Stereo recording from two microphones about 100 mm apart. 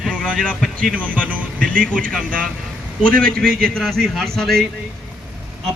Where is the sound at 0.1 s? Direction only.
10° left (ahead or behind).